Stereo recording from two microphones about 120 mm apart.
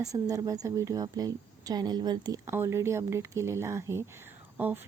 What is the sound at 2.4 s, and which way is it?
Speech, 20° right (ahead or behind).